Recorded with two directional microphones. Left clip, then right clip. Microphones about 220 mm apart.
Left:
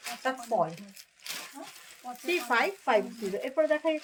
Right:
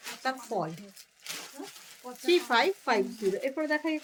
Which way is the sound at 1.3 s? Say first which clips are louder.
Left 1 dB; 15° left (ahead or behind).